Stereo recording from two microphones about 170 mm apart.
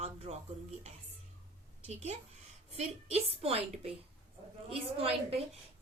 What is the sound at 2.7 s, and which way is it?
A woman's voice, 35° right (ahead or behind).